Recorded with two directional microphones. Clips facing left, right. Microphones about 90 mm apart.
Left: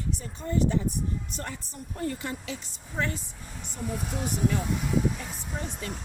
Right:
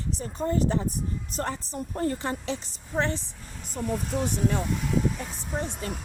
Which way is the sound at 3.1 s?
5° left (ahead or behind).